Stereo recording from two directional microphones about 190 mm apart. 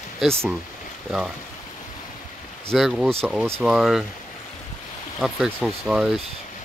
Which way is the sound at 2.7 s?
Centre (ahead or behind).